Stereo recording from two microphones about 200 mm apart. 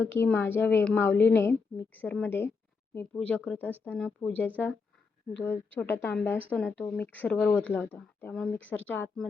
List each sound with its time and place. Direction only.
0.0 s speech: 10° left (ahead or behind)